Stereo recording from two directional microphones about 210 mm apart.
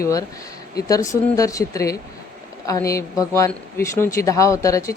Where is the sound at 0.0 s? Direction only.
15° left (ahead or behind).